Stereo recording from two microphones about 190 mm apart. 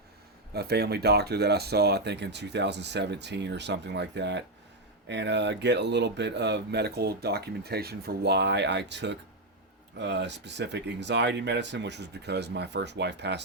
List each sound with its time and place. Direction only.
0.5 s speech: 55° right (ahead or behind)